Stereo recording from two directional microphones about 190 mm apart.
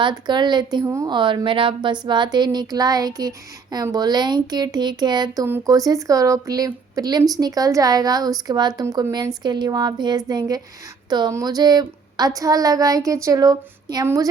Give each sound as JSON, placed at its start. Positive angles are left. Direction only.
{"t": 0.0, "sound": "a woman's voice", "side_deg": -25}